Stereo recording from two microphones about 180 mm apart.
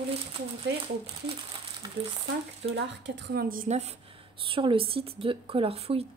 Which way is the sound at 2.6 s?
75° right (ahead or behind).